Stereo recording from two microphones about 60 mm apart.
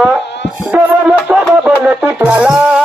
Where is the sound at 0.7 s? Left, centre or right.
Right.